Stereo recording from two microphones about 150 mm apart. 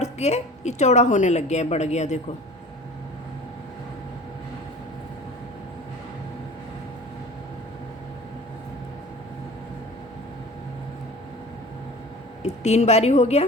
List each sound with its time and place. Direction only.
0.0 s a woman's voice: 50° left (ahead or behind)
12.4 s speech: 50° left (ahead or behind)